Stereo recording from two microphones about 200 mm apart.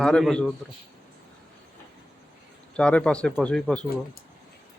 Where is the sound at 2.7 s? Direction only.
5° left (ahead or behind).